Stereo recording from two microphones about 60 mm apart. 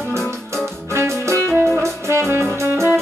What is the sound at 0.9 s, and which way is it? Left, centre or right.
Music, right.